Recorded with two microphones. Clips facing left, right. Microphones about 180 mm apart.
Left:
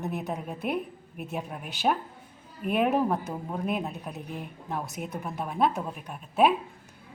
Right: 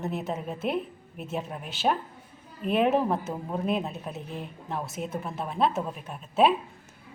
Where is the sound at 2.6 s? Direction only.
15° left (ahead or behind).